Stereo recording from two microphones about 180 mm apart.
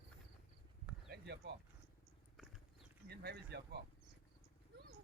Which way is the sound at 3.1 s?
65° right (ahead or behind).